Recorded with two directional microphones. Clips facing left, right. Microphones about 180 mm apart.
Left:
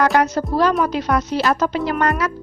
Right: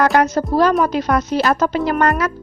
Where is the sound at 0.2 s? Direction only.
45° right (ahead or behind).